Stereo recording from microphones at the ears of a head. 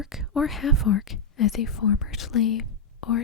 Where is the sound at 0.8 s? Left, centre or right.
Left.